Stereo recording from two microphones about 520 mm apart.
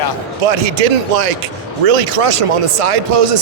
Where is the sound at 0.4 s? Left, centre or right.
Right.